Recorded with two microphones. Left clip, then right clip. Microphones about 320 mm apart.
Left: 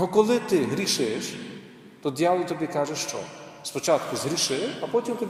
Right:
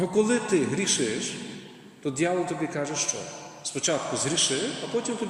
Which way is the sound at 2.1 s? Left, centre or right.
Centre.